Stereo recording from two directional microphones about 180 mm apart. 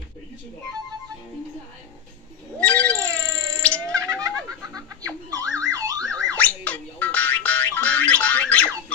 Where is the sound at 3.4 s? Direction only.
5° left (ahead or behind).